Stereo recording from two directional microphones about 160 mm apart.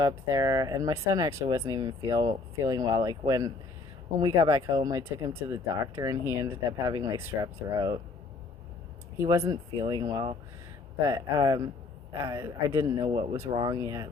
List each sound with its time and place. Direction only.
0.0 s speech: 20° right (ahead or behind)
9.1 s speech: 15° right (ahead or behind)